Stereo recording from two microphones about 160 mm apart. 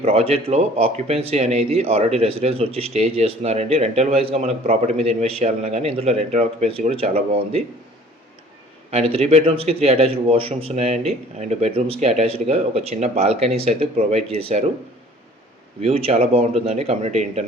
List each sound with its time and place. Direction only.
0.0 s speech: 40° right (ahead or behind)
8.9 s speech: 40° right (ahead or behind)
15.8 s speech: 40° right (ahead or behind)